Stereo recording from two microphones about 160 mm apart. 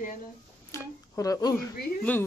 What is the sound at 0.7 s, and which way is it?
Speech, 20° left (ahead or behind).